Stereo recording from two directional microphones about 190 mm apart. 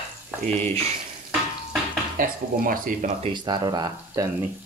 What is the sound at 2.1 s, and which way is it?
Speech, 50° right (ahead or behind).